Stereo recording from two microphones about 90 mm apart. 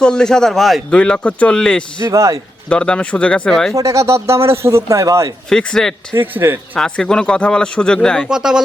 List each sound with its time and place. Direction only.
0.0 s speech: 10° left (ahead or behind)
2.0 s a man's voice: 35° right (ahead or behind)
2.6 s speech: 10° left (ahead or behind)
3.8 s a man's voice: 35° right (ahead or behind)
5.5 s speech: 5° left (ahead or behind)
6.1 s speech: 25° right (ahead or behind)
6.7 s speech: 5° left (ahead or behind)
8.3 s speech: 5° right (ahead or behind)